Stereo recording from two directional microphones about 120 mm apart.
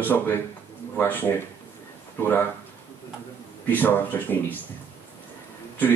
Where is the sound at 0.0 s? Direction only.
15° left (ahead or behind).